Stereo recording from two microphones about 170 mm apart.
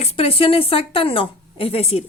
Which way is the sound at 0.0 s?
35° left (ahead or behind).